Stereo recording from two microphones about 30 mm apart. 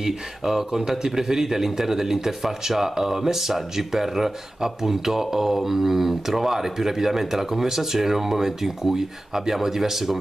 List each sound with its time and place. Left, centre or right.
0.0 s a man's voice: centre